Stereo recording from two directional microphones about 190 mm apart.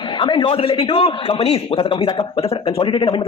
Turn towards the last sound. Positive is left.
turn(degrees=25)  # may be behind; listen again after turning